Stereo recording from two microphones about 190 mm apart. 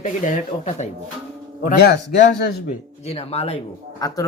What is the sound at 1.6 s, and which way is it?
Speech, 50° left (ahead or behind).